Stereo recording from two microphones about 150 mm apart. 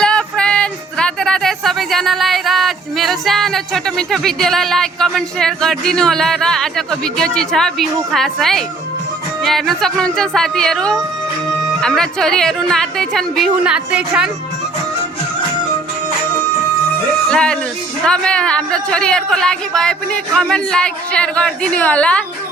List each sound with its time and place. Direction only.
0.0 s a man's voice: 5° left (ahead or behind)
17.2 s a man's voice: 5° left (ahead or behind)